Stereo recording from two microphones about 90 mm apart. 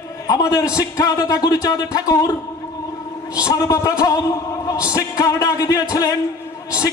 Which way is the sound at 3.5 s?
40° left (ahead or behind).